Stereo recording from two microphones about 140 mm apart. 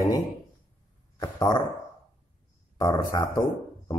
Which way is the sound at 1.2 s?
30° left (ahead or behind).